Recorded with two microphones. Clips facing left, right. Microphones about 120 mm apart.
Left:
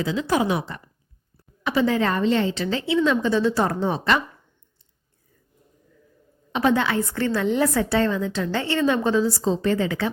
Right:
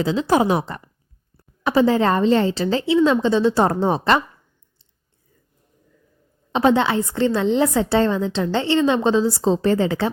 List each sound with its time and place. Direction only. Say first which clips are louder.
0.0 s a woman's voice: right 4 dB; 30° right (ahead or behind)
6.5 s a woman's voice: right 4 dB; 25° right (ahead or behind)